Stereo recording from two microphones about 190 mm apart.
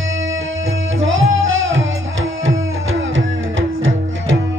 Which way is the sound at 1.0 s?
85° right.